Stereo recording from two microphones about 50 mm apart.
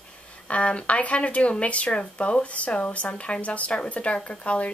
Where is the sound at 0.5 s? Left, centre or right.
Left.